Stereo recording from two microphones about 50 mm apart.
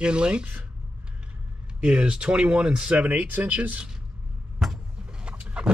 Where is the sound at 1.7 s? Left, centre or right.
Centre.